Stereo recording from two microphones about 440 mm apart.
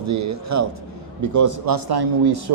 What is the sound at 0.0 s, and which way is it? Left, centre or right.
A man's voice, right.